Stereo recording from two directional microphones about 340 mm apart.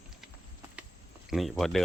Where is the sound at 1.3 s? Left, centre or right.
Centre.